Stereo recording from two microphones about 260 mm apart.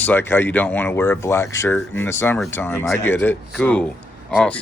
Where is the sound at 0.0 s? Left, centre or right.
Centre.